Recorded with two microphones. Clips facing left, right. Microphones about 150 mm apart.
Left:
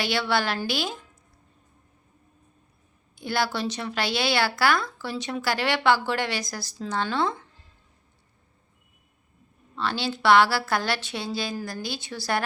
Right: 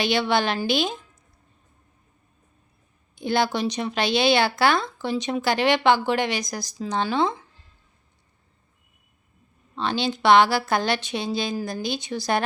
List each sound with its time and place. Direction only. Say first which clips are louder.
0.0 s speech: right 3 dB; 20° right (ahead or behind)
3.2 s speech: right 4 dB; 20° right (ahead or behind)
9.7 s speech: right 3 dB; 20° right (ahead or behind)